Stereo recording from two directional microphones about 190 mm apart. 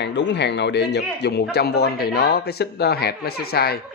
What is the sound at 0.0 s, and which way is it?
Speech, 70° left (ahead or behind).